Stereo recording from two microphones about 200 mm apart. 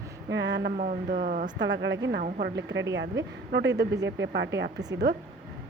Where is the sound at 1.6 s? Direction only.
60° right (ahead or behind).